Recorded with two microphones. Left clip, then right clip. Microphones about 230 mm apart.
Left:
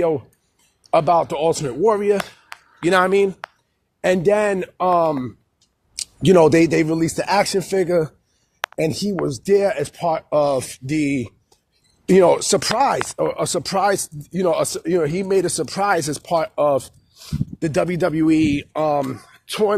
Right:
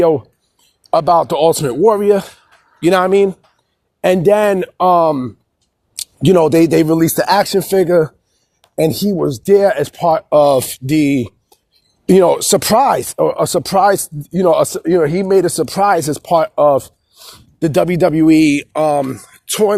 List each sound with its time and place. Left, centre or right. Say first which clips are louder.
0.6 s speech: right 3 dB; right